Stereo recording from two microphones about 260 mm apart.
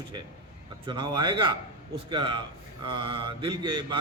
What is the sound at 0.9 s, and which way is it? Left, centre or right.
A man's voice, centre.